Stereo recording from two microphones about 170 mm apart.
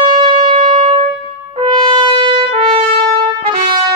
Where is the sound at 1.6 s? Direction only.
30° right (ahead or behind).